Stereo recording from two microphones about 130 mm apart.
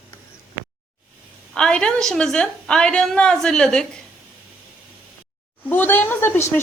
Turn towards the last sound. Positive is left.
turn(degrees=20)  # may be behind; listen again after turning